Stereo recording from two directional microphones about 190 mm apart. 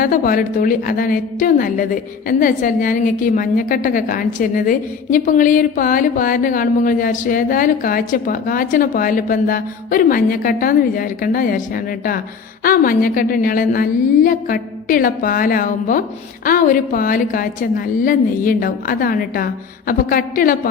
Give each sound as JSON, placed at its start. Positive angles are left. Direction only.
{"t": 0.0, "sound": "a woman's voice", "side_deg": 45}